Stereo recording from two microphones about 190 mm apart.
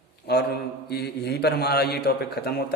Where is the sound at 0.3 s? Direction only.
55° left (ahead or behind).